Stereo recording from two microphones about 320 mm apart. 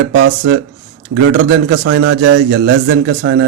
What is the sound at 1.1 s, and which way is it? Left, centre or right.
A man's voice, right.